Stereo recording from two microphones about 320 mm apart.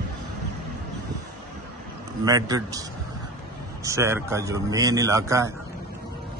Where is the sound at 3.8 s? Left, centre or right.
Centre.